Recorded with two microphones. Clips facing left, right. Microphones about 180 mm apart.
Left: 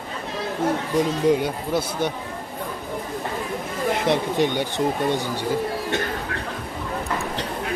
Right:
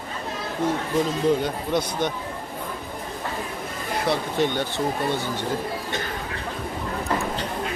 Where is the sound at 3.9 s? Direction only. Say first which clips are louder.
Left 1 dB; 20° left (ahead or behind).